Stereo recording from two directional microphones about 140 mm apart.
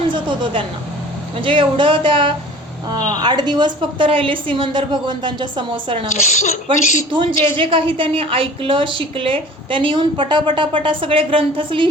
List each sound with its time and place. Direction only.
0.1 s a sound: 35° right (ahead or behind)
1.4 s a woman's voice: 35° right (ahead or behind)
6.2 s speech: 60° left (ahead or behind)
6.7 s a woman's voice: 35° right (ahead or behind)